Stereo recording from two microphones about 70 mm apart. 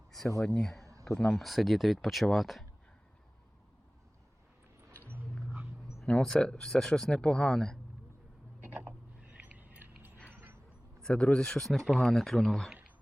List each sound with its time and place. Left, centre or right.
0.3 s speech: centre
1.5 s speech: centre
6.1 s speech: centre
8.6 s a sound: right
11.0 s speech: centre